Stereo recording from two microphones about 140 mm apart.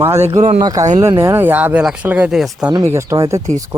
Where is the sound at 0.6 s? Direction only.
25° right (ahead or behind); by 2.7 s 5° right (ahead or behind).